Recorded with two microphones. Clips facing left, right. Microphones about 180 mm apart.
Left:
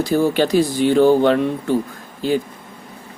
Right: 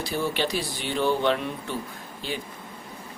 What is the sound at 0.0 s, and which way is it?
Speech, 45° left (ahead or behind).